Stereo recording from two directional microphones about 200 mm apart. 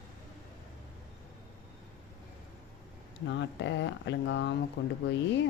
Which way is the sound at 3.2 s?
60° left (ahead or behind).